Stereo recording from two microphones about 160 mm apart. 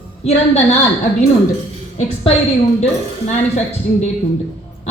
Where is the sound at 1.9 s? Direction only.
40° left (ahead or behind).